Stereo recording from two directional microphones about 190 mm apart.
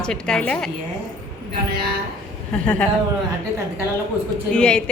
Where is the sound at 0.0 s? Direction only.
5° left (ahead or behind).